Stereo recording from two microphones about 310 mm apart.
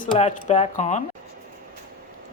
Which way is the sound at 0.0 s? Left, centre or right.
Left.